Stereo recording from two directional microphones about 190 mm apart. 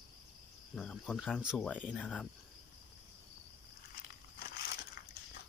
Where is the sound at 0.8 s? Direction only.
Centre (ahead or behind).